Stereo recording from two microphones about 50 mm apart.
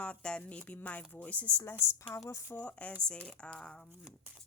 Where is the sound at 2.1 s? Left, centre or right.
Left.